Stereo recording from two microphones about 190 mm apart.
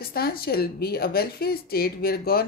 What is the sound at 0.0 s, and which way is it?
Speech, 55° left (ahead or behind).